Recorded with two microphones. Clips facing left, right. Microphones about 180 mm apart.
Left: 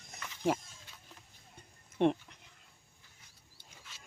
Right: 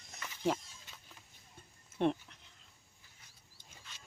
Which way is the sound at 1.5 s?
15° left (ahead or behind).